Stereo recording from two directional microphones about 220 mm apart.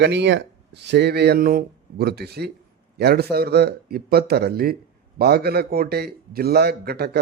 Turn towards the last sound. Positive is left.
turn(degrees=-45)  # may be behind; listen again after turning